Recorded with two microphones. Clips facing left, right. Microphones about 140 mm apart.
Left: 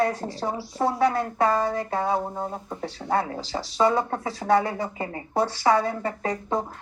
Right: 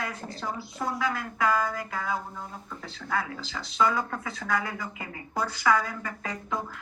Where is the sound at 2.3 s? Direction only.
45° left (ahead or behind).